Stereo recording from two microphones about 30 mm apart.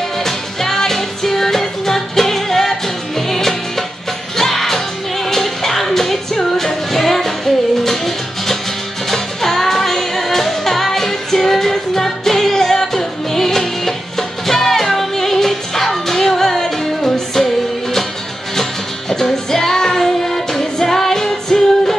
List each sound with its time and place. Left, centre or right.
0.2 s music: centre
18.6 s music: centre